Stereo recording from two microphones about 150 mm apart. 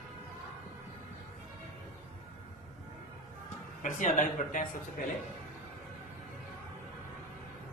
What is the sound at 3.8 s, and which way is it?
Speech, 55° left (ahead or behind).